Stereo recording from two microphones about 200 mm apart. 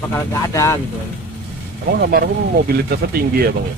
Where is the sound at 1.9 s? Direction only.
50° right (ahead or behind).